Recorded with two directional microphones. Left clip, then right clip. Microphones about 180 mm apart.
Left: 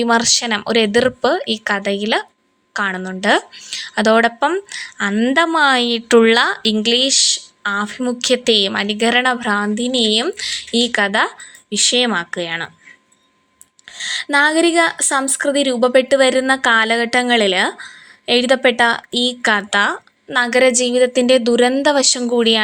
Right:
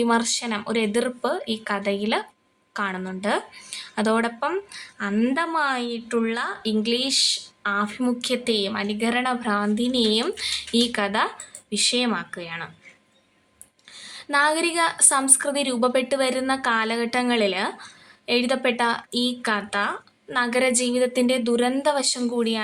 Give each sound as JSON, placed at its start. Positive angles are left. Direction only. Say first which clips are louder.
{"t": 0.0, "sound": "a woman's voice", "louder": "left 8 dB", "side_deg": 25}
{"t": 3.5, "sound": "a woman's voice", "louder": "left 10 dB", "side_deg": 20}
{"t": 3.8, "sound": "a woman's voice", "louder": "left 10 dB", "side_deg": 30}
{"t": 13.9, "sound": "a woman's voice", "louder": "left 7 dB", "side_deg": 30}